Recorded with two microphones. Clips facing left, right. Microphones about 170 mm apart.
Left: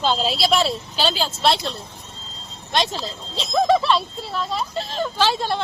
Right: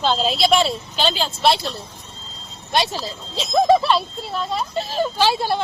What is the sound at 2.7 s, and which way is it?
Speech, 5° right (ahead or behind).